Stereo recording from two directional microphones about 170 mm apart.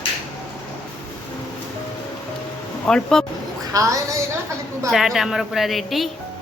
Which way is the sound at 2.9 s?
5° left (ahead or behind).